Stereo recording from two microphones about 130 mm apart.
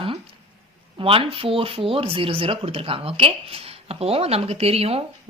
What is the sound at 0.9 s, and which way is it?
Speech, 45° right (ahead or behind).